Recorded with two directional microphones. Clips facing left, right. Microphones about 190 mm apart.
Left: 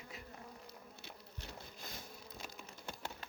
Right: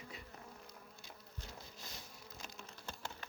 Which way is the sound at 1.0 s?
65° left (ahead or behind).